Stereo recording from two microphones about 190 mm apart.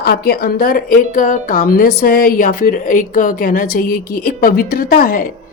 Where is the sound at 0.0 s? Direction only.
55° left (ahead or behind).